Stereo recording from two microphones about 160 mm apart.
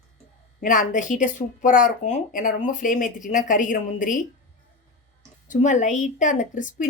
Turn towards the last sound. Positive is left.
turn(degrees=55)  # may be behind; listen again after turning